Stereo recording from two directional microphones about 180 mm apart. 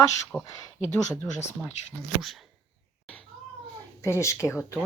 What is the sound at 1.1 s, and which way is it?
Speech, 15° left (ahead or behind).